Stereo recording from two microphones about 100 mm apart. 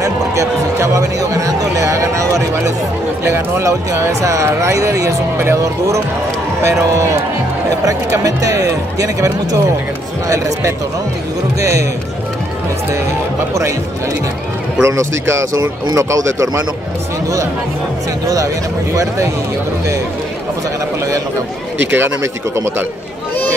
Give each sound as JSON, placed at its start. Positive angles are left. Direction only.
{"t": 0.0, "sound": "speech", "side_deg": -30}
{"t": 7.8, "sound": "speech", "side_deg": -35}
{"t": 14.8, "sound": "speech", "side_deg": -30}
{"t": 18.2, "sound": "speech", "side_deg": -35}
{"t": 21.9, "sound": "speech", "side_deg": -20}